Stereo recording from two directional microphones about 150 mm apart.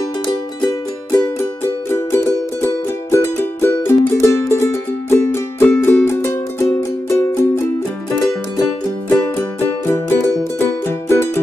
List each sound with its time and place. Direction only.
0.7 s music: 20° left (ahead or behind)
9.8 s music: 15° left (ahead or behind)